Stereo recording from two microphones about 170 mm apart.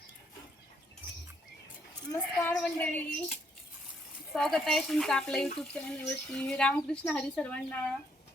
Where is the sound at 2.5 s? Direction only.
10° left (ahead or behind).